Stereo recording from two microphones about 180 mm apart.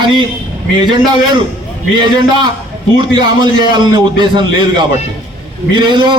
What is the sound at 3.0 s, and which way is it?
A man's voice, 25° right (ahead or behind).